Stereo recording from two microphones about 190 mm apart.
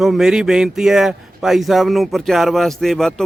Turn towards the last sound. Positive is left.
turn(degrees=0)  # may be behind; listen again after turning